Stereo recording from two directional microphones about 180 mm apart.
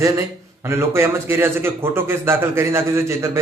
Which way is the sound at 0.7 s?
15° right (ahead or behind).